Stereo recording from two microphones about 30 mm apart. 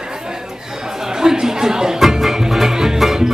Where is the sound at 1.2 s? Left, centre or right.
Centre.